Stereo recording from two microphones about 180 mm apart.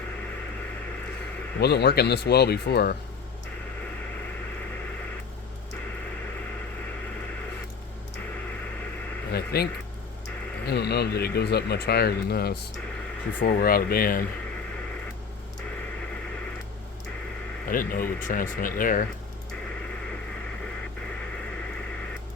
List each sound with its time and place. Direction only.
1.5 s speech: 65° left (ahead or behind)
9.3 s a sound: 60° left (ahead or behind)
10.7 s speech: 65° left (ahead or behind)
17.7 s speech: 50° left (ahead or behind)